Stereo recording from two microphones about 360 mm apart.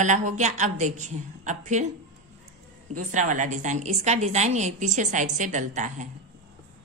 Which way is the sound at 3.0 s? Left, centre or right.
Right.